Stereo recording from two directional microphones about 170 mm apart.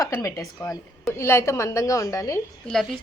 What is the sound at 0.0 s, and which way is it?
A woman's voice, 20° left (ahead or behind).